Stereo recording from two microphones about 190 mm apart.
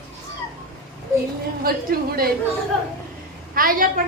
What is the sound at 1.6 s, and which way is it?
Speech, 50° right (ahead or behind).